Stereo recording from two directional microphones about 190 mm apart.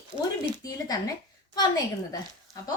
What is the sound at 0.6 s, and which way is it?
Speech, 20° left (ahead or behind).